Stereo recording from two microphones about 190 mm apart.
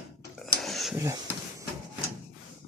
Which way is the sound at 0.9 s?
15° right (ahead or behind).